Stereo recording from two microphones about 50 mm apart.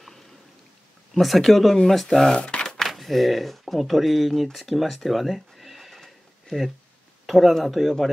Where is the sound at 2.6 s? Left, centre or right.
Centre.